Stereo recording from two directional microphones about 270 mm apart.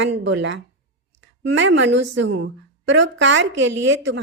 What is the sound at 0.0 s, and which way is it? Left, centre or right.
A woman's voice, right.